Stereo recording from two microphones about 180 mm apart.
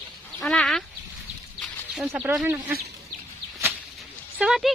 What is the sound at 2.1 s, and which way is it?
Speech, 10° right (ahead or behind).